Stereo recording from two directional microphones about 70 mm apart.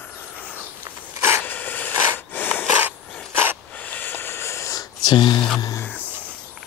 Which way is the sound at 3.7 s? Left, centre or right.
Left.